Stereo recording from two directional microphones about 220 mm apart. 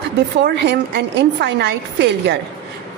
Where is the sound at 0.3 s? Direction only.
50° right (ahead or behind).